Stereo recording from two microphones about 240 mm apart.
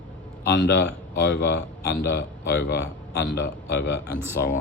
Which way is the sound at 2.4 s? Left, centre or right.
Left.